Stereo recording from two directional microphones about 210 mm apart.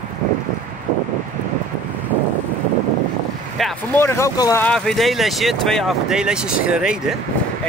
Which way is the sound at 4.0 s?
10° left (ahead or behind).